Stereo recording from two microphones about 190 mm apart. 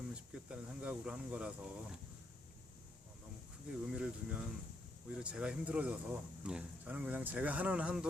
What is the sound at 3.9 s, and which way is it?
Speech, 5° right (ahead or behind).